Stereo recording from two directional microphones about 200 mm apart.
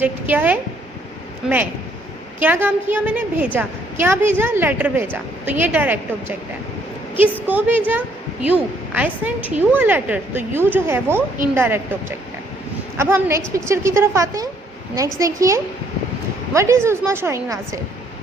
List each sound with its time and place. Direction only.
0.0 s a woman's voice: 10° right (ahead or behind)
2.4 s a woman's voice: 10° right (ahead or behind)
7.4 s a woman's voice: 10° right (ahead or behind)
13.0 s a woman's voice: 10° right (ahead or behind)